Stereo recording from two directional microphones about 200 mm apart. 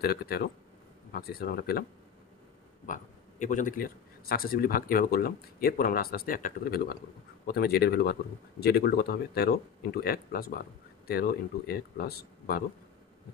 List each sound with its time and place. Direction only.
0.0 s a man's voice: 50° left (ahead or behind)
2.9 s a man's voice: 40° left (ahead or behind)